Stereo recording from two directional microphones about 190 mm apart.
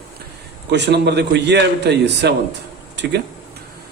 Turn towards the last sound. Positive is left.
turn(degrees=-65)  # may be behind; listen again after turning